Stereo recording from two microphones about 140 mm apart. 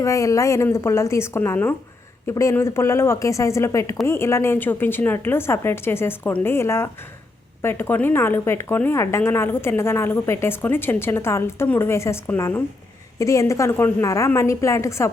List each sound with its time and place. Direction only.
0.0 s a woman's voice: 20° left (ahead or behind)